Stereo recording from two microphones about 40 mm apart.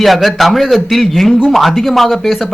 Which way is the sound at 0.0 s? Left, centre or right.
Centre.